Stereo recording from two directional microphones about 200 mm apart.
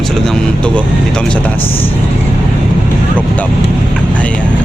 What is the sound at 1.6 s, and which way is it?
Speech, 25° left (ahead or behind).